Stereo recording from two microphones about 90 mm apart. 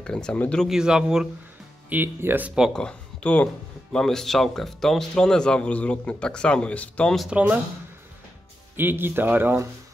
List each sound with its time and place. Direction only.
0.0 s speech: 10° left (ahead or behind)
0.7 s a man's voice: 10° right (ahead or behind)
1.9 s speech: 20° right (ahead or behind)
2.7 s speech: 10° left (ahead or behind)
7.2 s a man's voice: 15° right (ahead or behind)
8.7 s speech: 25° right (ahead or behind)